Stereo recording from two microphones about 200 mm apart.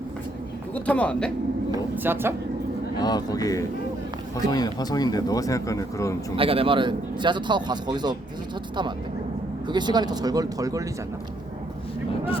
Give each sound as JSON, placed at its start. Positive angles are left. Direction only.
{"t": 0.7, "sound": "speech", "side_deg": 5}
{"t": 1.7, "sound": "speech", "side_deg": -10}
{"t": 3.0, "sound": "speech", "side_deg": 20}
{"t": 6.3, "sound": "a man's voice", "side_deg": -25}
{"t": 9.6, "sound": "a man's voice", "side_deg": -20}